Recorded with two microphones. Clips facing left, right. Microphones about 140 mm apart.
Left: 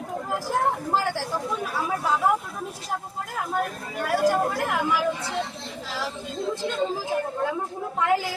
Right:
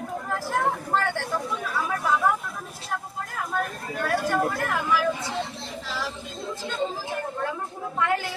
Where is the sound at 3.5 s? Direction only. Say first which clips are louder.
Left 1 dB; 15° left (ahead or behind).